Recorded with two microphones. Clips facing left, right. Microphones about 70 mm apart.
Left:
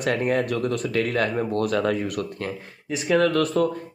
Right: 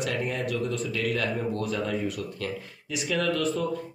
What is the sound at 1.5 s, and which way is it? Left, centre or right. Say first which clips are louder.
Speech: left 6 dB; left.